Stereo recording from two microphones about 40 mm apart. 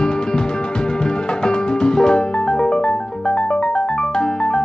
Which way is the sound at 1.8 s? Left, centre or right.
Centre.